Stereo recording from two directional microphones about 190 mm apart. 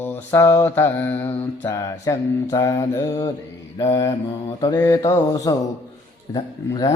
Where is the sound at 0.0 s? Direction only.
10° left (ahead or behind).